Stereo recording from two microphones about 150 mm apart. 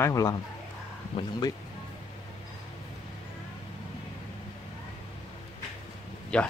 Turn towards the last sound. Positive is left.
turn(degrees=5)  # may be behind; listen again after turning